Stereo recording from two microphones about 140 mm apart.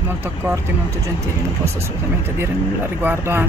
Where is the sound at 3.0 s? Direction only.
15° right (ahead or behind).